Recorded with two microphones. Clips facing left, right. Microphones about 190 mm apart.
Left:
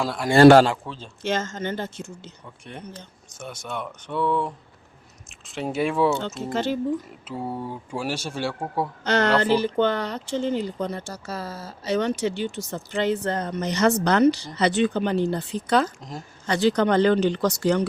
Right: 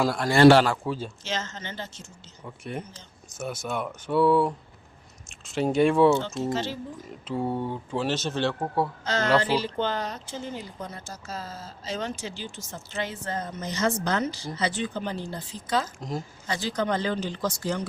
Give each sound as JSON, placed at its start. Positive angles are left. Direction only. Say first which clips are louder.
{"t": 0.0, "sound": "speech", "louder": "left 3 dB", "side_deg": 0}
{"t": 1.2, "sound": "speech", "louder": "left 7 dB", "side_deg": 50}
{"t": 3.3, "sound": "speech", "louder": "right 3 dB", "side_deg": -5}
{"t": 6.2, "sound": "speech", "louder": "left 2 dB", "side_deg": 55}
{"t": 7.3, "sound": "speech", "louder": "right 3 dB", "side_deg": 5}
{"t": 9.0, "sound": "speech", "louder": "left 6 dB", "side_deg": 65}
{"t": 9.4, "sound": "speech", "louder": "left 6 dB", "side_deg": 55}
{"t": 16.0, "sound": "speech", "louder": "right 4 dB", "side_deg": -5}
{"t": 16.5, "sound": "speech", "louder": "left 8 dB", "side_deg": 70}